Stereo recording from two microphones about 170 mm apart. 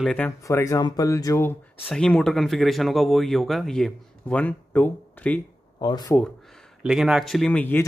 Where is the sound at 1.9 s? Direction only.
5° left (ahead or behind).